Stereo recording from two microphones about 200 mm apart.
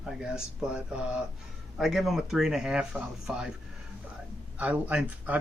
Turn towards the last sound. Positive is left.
turn(degrees=-5)  # may be behind; listen again after turning